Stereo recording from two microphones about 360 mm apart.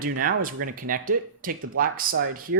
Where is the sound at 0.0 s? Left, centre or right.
Right.